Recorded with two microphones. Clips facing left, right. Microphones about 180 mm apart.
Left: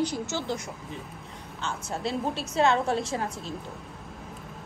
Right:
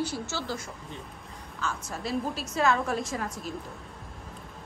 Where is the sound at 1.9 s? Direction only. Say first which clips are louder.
Left 3 dB; 25° left (ahead or behind).